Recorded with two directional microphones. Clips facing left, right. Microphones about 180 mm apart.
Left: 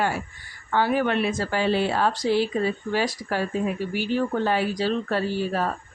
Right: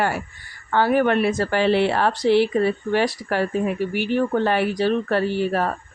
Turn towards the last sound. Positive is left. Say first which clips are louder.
# right 4 dB
turn(degrees=-65)  # may be behind; listen again after turning